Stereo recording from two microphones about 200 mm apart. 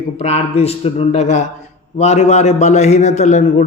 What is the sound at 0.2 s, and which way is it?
Speech, 30° left (ahead or behind).